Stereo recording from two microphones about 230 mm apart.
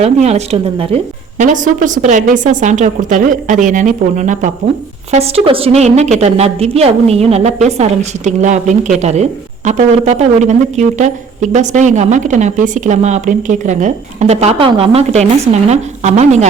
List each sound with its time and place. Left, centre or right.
0.0 s a woman's voice: right